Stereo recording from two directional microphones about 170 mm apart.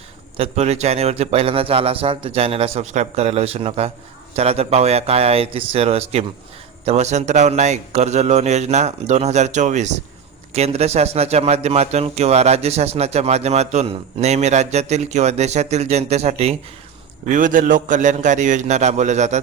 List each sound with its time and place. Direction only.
0.3 s a man's voice: 40° right (ahead or behind)
17.2 s a man's voice: 50° right (ahead or behind)